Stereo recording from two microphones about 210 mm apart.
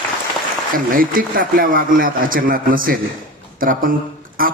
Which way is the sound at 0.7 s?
40° right (ahead or behind).